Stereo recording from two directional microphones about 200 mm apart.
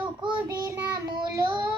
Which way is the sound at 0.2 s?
25° right (ahead or behind).